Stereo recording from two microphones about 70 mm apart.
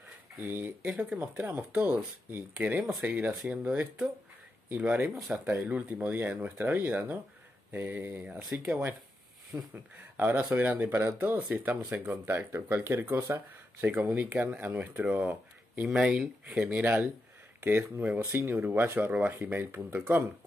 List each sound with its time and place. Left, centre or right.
0.4 s speech: right
0.8 s speech: centre
1.7 s speech: right
2.5 s speech: centre
5.1 s speech: centre
5.6 s speech: centre
12.3 s speech: right
17.6 s speech: right